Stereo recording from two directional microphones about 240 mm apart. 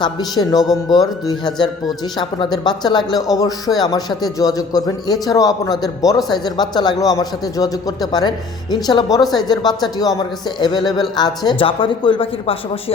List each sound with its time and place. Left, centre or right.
0.0 s speech: centre